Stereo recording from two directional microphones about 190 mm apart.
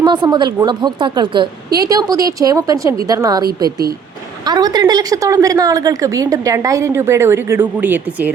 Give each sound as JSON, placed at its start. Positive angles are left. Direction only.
{"t": 0.0, "sound": "a woman's voice", "side_deg": -25}
{"t": 4.4, "sound": "a woman's voice", "side_deg": -20}